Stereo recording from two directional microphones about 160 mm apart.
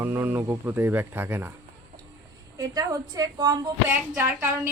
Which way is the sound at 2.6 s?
20° right (ahead or behind).